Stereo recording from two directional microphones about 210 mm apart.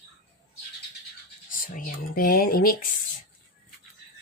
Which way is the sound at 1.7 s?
40° left (ahead or behind).